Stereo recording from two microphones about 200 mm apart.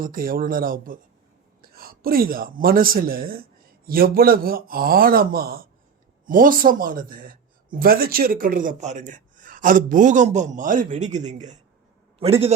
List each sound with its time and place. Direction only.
0.0 s a man's voice: 45° right (ahead or behind); by 12.5 s 30° right (ahead or behind)